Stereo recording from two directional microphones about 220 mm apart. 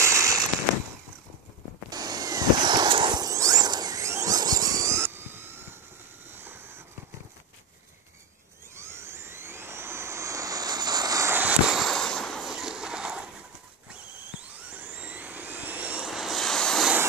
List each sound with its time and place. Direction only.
0.0 s fireworks: 15° right (ahead or behind)
1.9 s a sound: 15° right (ahead or behind)
8.7 s aircraft: 10° right (ahead or behind)
14.7 s vehicle: 5° right (ahead or behind)